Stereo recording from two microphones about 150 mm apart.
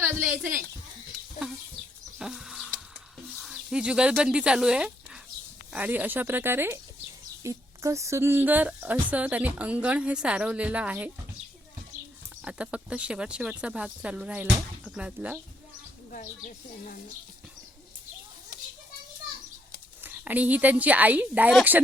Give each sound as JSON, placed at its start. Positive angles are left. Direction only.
{"t": 2.1, "sound": "goat", "side_deg": -5}
{"t": 3.4, "sound": "a woman's voice", "side_deg": -5}
{"t": 12.5, "sound": "a woman's voice", "side_deg": -10}
{"t": 16.1, "sound": "speech", "side_deg": 60}
{"t": 20.0, "sound": "a woman's voice", "side_deg": -10}